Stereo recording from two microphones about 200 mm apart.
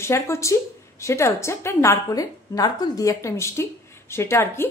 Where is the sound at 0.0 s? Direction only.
15° left (ahead or behind).